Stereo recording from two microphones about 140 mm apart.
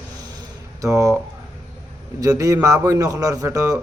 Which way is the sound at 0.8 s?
20° right (ahead or behind).